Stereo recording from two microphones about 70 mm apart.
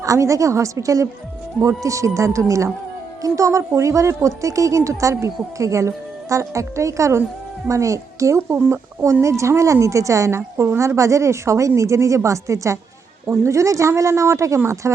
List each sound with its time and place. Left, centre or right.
0.0 s a woman's voice: right
8.4 s a woman's voice: right